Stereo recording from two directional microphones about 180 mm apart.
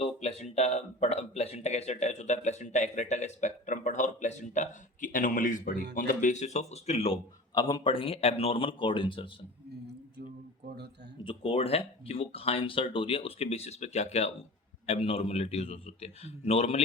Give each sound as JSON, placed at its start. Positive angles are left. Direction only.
{"t": 0.0, "sound": "a sound", "side_deg": 35}
{"t": 0.5, "sound": "speech", "side_deg": 40}
{"t": 11.2, "sound": "speech", "side_deg": 30}